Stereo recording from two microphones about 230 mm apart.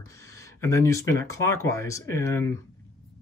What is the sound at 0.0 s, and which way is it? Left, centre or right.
Speech, centre.